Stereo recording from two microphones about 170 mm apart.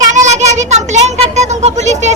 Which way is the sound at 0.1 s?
45° right (ahead or behind).